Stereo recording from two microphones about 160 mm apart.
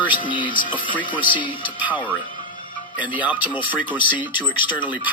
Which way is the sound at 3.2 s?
10° right (ahead or behind).